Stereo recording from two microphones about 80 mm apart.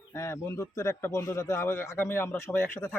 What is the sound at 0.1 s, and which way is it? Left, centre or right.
A man's voice, left.